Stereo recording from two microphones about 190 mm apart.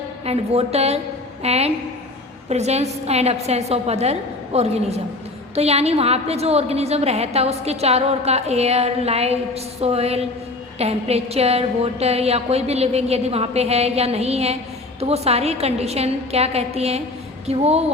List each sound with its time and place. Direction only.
0.3 s a woman's voice: 35° right (ahead or behind)